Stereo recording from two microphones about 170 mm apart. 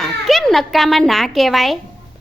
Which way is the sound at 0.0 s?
Centre (ahead or behind).